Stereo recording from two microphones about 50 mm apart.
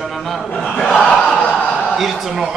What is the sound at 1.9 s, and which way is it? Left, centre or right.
Speech, centre.